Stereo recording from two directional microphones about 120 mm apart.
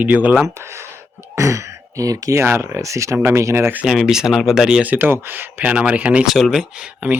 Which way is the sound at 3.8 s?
5° right (ahead or behind).